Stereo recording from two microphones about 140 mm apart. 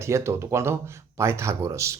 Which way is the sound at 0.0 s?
20° right (ahead or behind).